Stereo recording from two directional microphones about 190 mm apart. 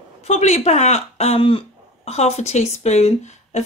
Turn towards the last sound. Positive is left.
turn(degrees=35)  # may be behind; listen again after turning